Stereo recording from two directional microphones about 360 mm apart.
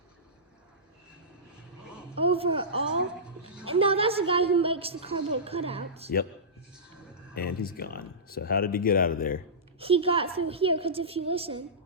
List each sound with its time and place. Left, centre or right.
2.2 s a woman's voice: centre
7.3 s speech: left
9.8 s a woman's voice: centre